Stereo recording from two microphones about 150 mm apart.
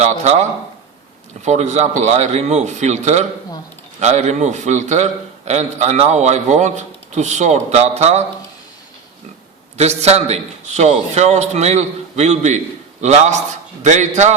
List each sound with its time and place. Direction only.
0.0 s a man's voice: 45° right (ahead or behind)
1.5 s a man's voice: 50° right (ahead or behind)
9.7 s a man's voice: 45° right (ahead or behind)